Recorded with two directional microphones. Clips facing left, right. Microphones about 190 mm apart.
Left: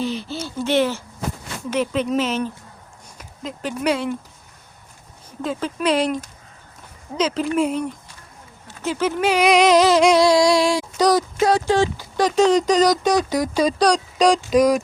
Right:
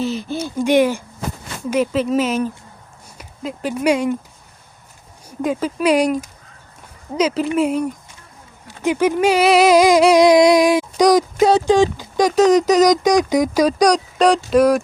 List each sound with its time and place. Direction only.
0.0 s speech: 45° right (ahead or behind)
0.3 s speech: 15° right (ahead or behind)
5.4 s speech: 10° right (ahead or behind)